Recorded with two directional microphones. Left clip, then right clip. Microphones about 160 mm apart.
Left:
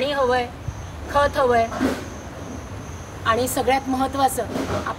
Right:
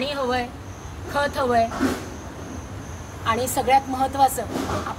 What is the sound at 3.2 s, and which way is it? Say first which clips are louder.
A woman's voice: left 2 dB; 25° left (ahead or behind).